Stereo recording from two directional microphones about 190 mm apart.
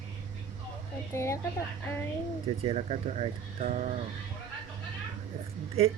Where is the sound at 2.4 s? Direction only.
30° right (ahead or behind).